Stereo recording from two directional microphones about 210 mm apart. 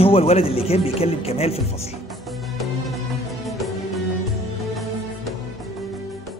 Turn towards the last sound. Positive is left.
turn(degrees=0)  # may be behind; listen again after turning